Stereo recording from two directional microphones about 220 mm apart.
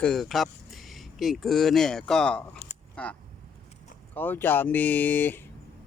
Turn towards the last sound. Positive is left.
turn(degrees=10)  # may be behind; listen again after turning